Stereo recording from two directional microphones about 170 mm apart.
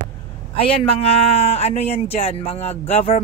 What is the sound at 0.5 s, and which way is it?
A man's voice, 35° left (ahead or behind).